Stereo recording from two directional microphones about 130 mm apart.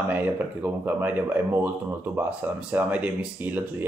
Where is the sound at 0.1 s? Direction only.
15° right (ahead or behind).